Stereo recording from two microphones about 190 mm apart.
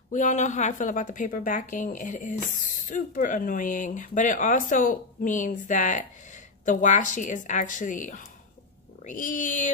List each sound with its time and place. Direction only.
0.1 s a woman's voice: 40° left (ahead or behind)
9.0 s cat: 45° left (ahead or behind)